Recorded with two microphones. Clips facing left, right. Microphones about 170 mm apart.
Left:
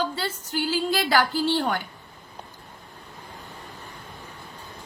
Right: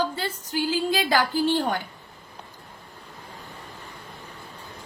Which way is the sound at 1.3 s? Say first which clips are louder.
Right 1 dB; 15° right (ahead or behind).